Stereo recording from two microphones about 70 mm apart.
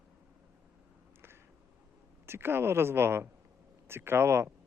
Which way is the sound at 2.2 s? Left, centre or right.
Right.